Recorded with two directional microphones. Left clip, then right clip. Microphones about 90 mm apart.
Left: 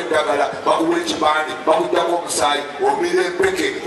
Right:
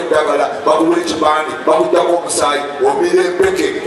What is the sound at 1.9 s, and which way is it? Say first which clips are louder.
A man's voice: right 5 dB; 25° left (ahead or behind).